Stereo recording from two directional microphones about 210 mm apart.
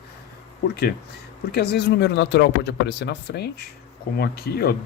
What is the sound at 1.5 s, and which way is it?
Speech, 50° left (ahead or behind).